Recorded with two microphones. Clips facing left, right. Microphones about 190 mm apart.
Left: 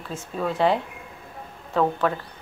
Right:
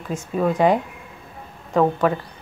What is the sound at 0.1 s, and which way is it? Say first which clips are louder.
A woman's voice: right 6 dB; 15° right (ahead or behind).